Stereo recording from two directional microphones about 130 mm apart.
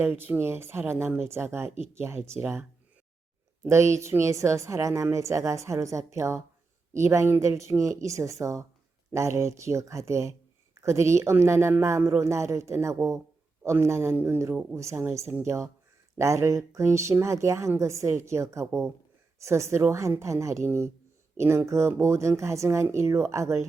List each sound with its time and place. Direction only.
0.0 s speech: 15° right (ahead or behind)